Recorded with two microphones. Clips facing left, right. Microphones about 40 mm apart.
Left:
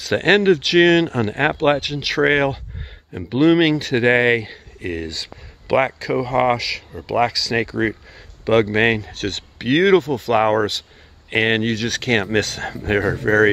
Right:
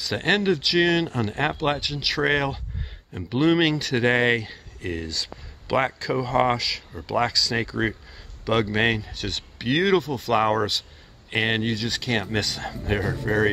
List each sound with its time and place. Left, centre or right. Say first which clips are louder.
0.0 s speech: left 7 dB; left; by 6.5 s centre
6.5 s speech: left 5 dB; left
7.1 s speech: left 5 dB; centre
7.3 s speech: left 4 dB; left
9.6 s speech: left 6 dB; left
10.2 s speech: left 5 dB; centre
11.7 s speech: left 6 dB; left